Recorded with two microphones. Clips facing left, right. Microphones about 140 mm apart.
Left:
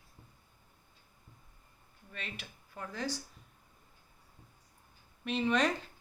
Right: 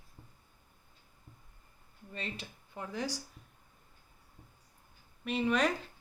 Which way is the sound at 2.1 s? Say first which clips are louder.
Right 4 dB; 30° right (ahead or behind).